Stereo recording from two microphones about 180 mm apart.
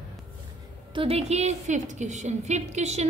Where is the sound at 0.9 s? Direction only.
35° right (ahead or behind).